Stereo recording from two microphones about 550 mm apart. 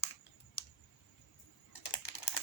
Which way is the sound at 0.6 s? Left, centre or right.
Left.